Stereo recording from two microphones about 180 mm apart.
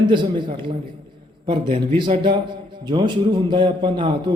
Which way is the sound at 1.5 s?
30° right (ahead or behind).